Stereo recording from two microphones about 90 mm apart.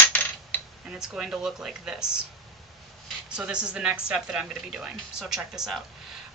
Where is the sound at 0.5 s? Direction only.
20° left (ahead or behind).